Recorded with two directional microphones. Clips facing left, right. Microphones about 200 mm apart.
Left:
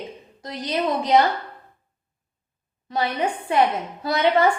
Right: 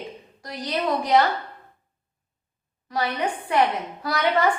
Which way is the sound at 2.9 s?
25° left (ahead or behind).